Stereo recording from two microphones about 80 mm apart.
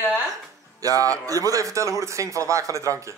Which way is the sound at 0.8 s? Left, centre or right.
Right.